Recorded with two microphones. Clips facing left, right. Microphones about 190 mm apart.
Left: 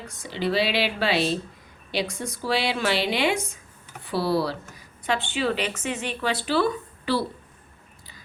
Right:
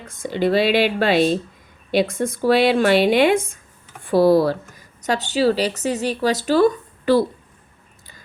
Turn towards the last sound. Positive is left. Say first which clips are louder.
# right 9 dB
turn(degrees=-45)  # may be behind; listen again after turning